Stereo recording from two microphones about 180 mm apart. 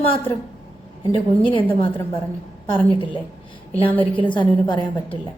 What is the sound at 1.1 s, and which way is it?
Speech, 30° left (ahead or behind).